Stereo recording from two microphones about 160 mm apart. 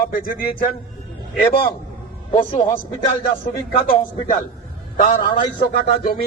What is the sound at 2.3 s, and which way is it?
Speech, 35° left (ahead or behind).